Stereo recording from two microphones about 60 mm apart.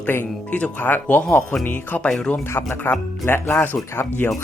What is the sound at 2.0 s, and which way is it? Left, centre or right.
Speech, centre.